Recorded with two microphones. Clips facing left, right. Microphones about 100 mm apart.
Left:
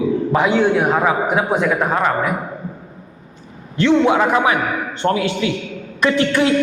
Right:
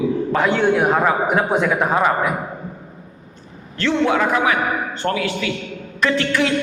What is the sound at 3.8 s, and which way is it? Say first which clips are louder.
Speech: left 4 dB; 20° left (ahead or behind).